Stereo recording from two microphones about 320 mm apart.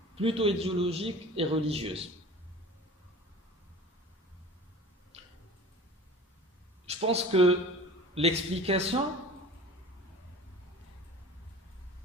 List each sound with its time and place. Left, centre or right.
0.2 s a man's voice: centre
5.1 s tick-tock: centre
6.8 s speech: centre